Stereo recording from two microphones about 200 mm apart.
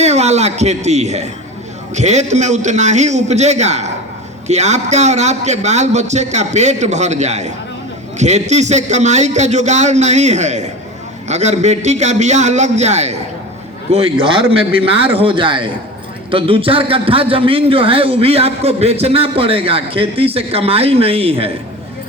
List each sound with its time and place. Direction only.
0.0 s a man's voice: 35° right (ahead or behind)